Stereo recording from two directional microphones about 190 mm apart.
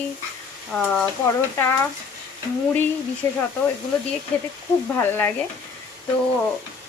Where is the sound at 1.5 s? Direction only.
15° left (ahead or behind).